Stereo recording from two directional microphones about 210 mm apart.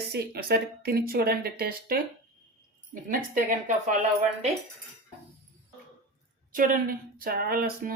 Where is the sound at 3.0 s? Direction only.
40° right (ahead or behind).